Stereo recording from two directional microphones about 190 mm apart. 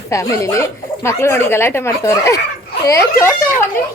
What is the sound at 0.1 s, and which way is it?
Speech, 15° left (ahead or behind).